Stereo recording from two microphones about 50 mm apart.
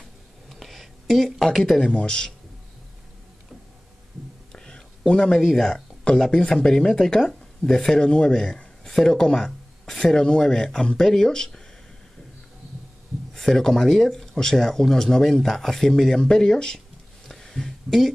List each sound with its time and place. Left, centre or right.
0.5 s a sound: centre
2.0 s speech: centre
4.5 s whispering: centre
6.3 s speech: centre
13.3 s speech: centre
17.3 s a sound: centre